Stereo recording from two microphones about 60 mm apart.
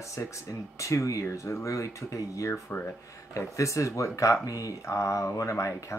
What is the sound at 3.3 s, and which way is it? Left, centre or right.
A man's voice, left.